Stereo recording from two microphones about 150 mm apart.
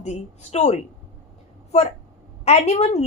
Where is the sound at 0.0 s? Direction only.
45° left (ahead or behind).